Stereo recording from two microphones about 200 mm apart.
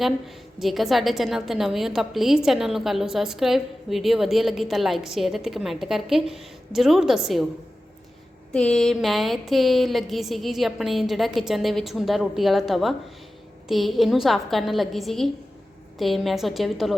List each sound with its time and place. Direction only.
0.0 s a woman's voice: centre (ahead or behind)
8.5 s a woman's voice: 5° left (ahead or behind)